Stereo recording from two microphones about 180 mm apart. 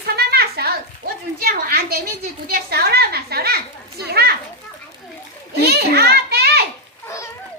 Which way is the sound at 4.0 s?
60° right (ahead or behind).